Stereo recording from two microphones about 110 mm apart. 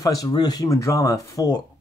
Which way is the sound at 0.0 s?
35° left (ahead or behind).